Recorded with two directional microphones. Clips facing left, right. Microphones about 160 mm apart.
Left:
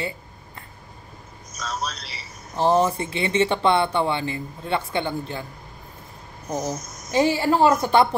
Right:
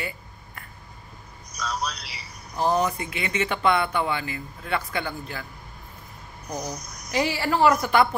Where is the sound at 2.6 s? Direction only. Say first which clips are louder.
Left 4 dB; 25° left (ahead or behind).